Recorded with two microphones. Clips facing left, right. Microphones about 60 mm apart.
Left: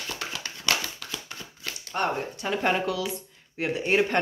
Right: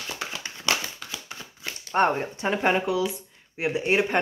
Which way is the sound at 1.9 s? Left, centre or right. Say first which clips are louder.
Right 6 dB; right.